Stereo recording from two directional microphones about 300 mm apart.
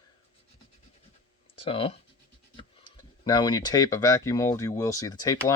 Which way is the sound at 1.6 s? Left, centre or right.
Centre.